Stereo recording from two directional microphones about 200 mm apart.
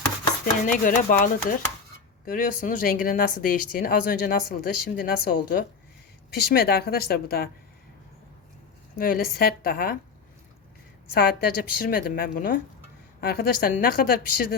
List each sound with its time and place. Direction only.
0.9 s speech: 45° left (ahead or behind)
9.0 s speech: 45° left (ahead or behind)
11.1 s speech: 50° left (ahead or behind)